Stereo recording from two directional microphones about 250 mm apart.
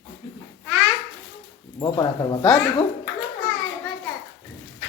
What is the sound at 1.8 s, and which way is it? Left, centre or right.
Speech, centre.